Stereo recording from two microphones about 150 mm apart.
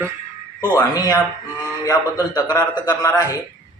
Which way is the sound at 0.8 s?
25° left (ahead or behind).